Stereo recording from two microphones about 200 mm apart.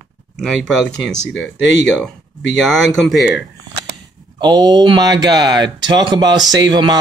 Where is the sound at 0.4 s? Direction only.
5° left (ahead or behind).